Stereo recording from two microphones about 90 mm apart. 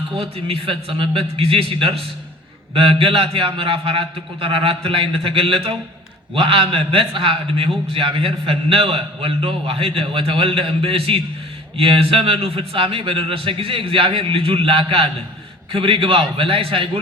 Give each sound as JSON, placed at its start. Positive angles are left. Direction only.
{"t": 0.2, "sound": "a man's voice", "side_deg": -90}
{"t": 6.3, "sound": "a man's voice", "side_deg": -75}
{"t": 15.7, "sound": "a man's voice", "side_deg": -90}